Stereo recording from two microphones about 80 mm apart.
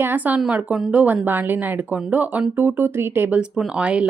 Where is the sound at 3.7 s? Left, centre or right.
Centre.